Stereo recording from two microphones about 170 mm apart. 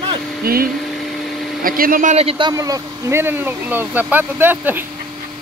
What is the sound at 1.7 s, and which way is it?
Speech, 55° right (ahead or behind).